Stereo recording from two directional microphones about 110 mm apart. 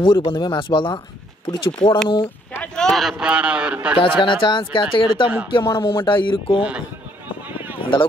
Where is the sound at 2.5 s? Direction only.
10° left (ahead or behind); by 4.0 s 10° right (ahead or behind).